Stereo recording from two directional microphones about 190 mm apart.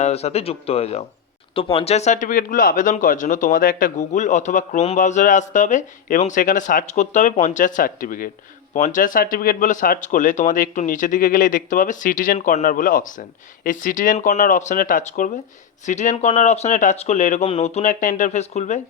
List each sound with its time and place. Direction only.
0.0 s speech: 35° left (ahead or behind)